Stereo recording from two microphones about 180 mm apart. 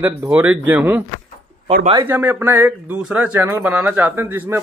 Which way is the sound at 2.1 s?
10° right (ahead or behind).